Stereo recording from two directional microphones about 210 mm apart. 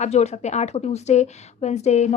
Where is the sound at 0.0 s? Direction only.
30° left (ahead or behind).